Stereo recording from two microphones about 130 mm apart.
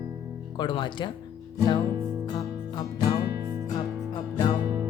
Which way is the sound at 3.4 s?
30° right (ahead or behind).